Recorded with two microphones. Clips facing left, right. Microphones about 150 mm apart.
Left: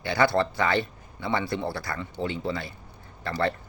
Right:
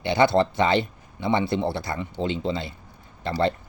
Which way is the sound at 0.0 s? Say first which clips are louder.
Right 4 dB; 20° right (ahead or behind).